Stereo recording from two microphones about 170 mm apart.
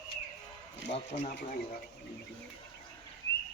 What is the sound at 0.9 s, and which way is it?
Speech, 40° left (ahead or behind).